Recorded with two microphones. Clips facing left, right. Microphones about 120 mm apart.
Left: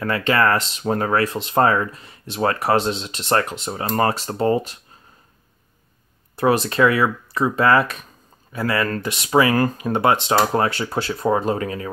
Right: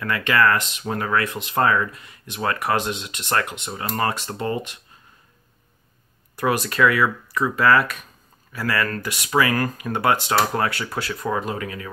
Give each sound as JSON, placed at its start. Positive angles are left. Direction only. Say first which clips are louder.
{"t": 0.0, "sound": "speech", "louder": "left 1 dB", "side_deg": 30}
{"t": 6.3, "sound": "speech", "louder": "left 4 dB", "side_deg": 30}